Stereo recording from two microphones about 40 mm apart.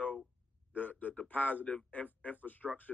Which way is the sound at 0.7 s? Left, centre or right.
Left.